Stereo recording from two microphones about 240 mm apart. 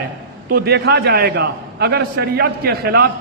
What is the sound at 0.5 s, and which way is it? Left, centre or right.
A man's voice, right.